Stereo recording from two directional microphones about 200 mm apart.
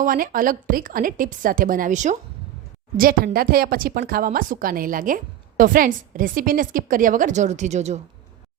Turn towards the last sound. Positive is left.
turn(degrees=-35)  # may be behind; listen again after turning